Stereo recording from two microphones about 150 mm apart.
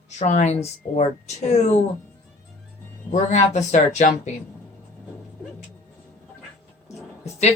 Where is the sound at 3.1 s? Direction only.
50° left (ahead or behind).